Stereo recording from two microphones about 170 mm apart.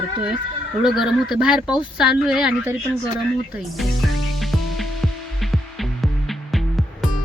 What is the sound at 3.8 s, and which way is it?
Music, centre (ahead or behind).